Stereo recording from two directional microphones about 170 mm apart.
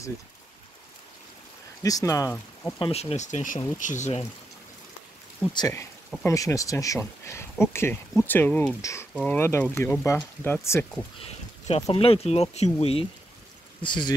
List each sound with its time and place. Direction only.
1.8 s speech: 20° left (ahead or behind)
2.8 s speech: 35° left (ahead or behind)
5.5 s speech: 20° left (ahead or behind)
11.1 s a sound: 35° left (ahead or behind)
11.9 s speech: 35° left (ahead or behind)
13.8 s speech: 25° left (ahead or behind)